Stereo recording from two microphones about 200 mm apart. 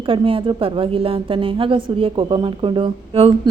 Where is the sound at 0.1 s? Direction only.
25° right (ahead or behind).